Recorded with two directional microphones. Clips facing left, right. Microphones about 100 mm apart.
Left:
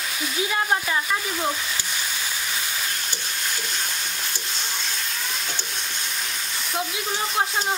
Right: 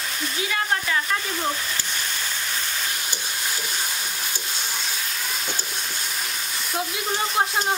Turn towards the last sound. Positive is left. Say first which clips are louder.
# right 1 dB
turn(degrees=0)  # may be behind; listen again after turning